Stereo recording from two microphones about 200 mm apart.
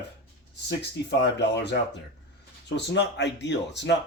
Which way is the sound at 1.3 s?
60° left (ahead or behind).